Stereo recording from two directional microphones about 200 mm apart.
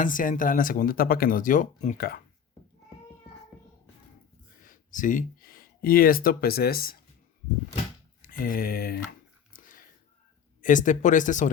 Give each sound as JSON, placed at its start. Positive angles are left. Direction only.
{"t": 0.0, "sound": "speech", "side_deg": 40}
{"t": 4.6, "sound": "speech", "side_deg": 40}
{"t": 8.2, "sound": "speech", "side_deg": 45}
{"t": 9.5, "sound": "a sound", "side_deg": 45}
{"t": 10.6, "sound": "speech", "side_deg": 40}